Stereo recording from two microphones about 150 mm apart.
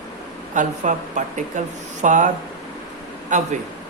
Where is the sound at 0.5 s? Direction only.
55° right (ahead or behind).